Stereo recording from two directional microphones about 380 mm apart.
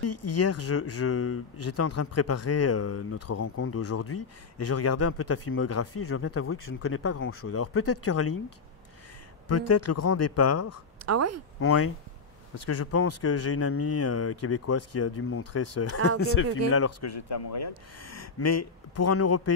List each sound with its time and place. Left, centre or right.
0.0 s speech: left
9.5 s speech: left
11.1 s speech: right
11.6 s speech: left